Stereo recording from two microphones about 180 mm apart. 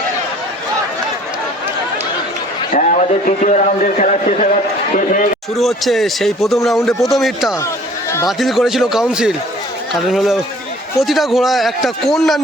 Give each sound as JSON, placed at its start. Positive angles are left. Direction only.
{"t": 2.7, "sound": "a man's voice", "side_deg": 45}
{"t": 5.5, "sound": "a man's voice", "side_deg": 0}